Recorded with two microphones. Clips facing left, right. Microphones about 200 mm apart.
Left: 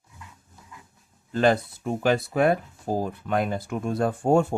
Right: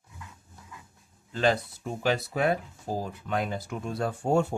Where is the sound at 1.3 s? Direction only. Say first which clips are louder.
Left 4 dB; 50° left (ahead or behind).